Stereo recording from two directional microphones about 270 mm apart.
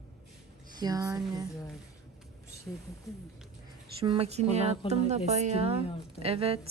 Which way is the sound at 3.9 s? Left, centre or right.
Centre.